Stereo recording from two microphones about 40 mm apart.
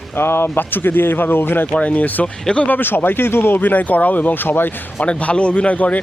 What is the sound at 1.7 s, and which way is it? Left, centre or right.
Speech, left.